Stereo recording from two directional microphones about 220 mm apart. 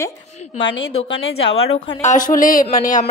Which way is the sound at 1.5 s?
30° left (ahead or behind).